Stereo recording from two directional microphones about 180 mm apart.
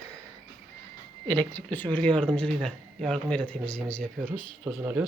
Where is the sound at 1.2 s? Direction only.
10° left (ahead or behind).